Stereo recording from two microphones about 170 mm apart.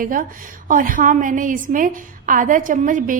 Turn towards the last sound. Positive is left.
turn(degrees=-50)  # may be behind; listen again after turning